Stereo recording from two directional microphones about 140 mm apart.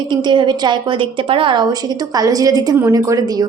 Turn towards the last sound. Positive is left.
turn(degrees=-25)  # may be behind; listen again after turning